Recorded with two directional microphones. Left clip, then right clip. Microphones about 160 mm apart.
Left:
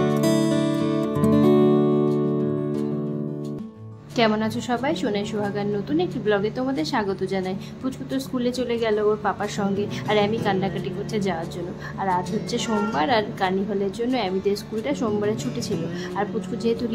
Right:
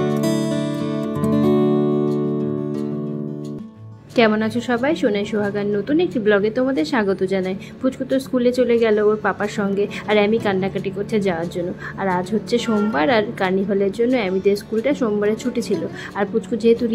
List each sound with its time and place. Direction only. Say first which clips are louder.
0.0 s music: even; centre (ahead or behind)
4.2 s a woman's voice: right 5 dB; 15° right (ahead or behind)